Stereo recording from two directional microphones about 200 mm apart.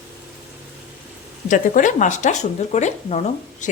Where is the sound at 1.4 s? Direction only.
40° left (ahead or behind).